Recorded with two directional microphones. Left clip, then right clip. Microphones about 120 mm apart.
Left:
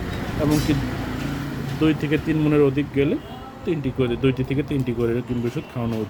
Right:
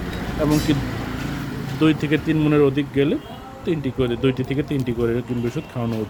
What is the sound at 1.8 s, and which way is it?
Speech, 45° right (ahead or behind).